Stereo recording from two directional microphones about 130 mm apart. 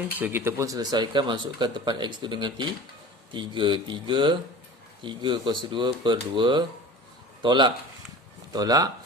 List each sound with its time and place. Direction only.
0.2 s speech: 15° right (ahead or behind)